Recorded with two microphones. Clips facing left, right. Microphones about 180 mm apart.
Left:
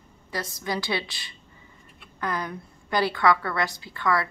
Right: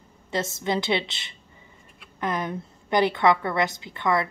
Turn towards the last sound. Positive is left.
turn(degrees=-20)  # may be behind; listen again after turning